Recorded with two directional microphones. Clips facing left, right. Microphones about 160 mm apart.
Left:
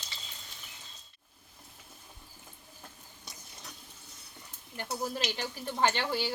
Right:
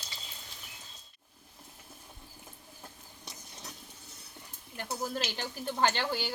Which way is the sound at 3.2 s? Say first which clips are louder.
Right 2 dB; 20° right (ahead or behind).